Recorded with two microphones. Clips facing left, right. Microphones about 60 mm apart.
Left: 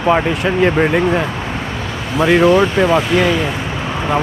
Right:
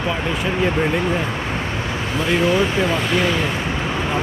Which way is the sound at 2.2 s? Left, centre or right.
Left.